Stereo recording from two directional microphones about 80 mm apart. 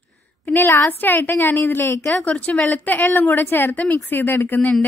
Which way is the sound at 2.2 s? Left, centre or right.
Centre.